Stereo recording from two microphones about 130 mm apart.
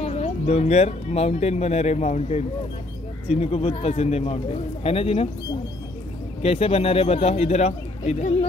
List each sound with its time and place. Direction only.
0.0 s speech: 60° left (ahead or behind)
6.4 s speech: 50° left (ahead or behind)